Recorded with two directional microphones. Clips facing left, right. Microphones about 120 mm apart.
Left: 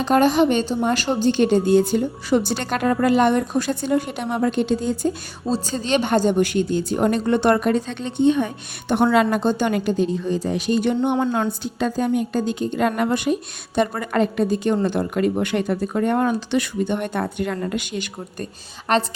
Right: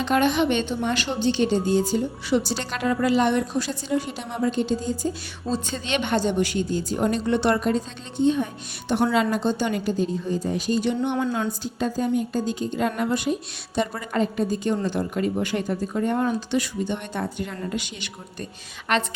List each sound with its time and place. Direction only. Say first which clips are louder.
0.0 s speech: left 4 dB; 40° left (ahead or behind); by 5.1 s 65° left (ahead or behind)
5.5 s a woman's voice: left 5 dB; 35° left (ahead or behind); by 10.8 s 85° left
10.8 s a woman's voice: left 5 dB; 50° left (ahead or behind)
18.9 s a woman's voice: left 4 dB; 35° left (ahead or behind)